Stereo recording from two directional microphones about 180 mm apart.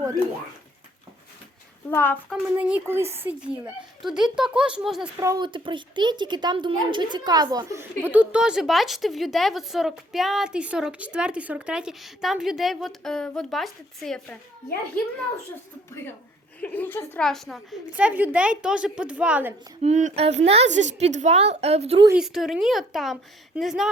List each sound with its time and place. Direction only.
1.9 s a child's voice: 10° left (ahead or behind)
2.3 s a woman's voice: 5° right (ahead or behind)
5.2 s a woman's voice: 15° right (ahead or behind)
5.5 s a woman's voice: 25° right (ahead or behind); by 14.3 s centre (ahead or behind)
16.6 s a woman's voice: 10° left (ahead or behind); by 19.5 s 10° right (ahead or behind)
19.8 s a woman's voice: 40° right (ahead or behind)
22.1 s a woman's voice: 5° right (ahead or behind)